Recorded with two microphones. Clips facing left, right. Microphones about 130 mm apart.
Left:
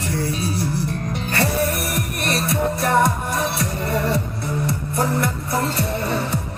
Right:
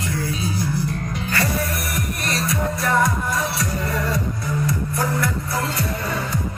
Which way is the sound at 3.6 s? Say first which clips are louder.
Left 2 dB; 30° left (ahead or behind).